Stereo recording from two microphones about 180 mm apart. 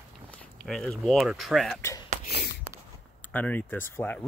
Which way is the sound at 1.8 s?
15° left (ahead or behind).